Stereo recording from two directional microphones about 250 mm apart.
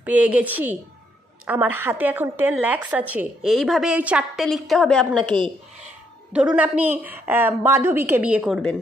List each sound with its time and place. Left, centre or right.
0.0 s a woman's voice: centre
5.3 s speech: centre
6.3 s a woman's voice: centre